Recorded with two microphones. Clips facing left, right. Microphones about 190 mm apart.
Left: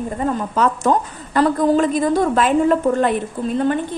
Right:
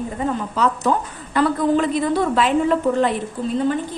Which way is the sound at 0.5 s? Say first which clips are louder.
Left 3 dB; 50° left (ahead or behind).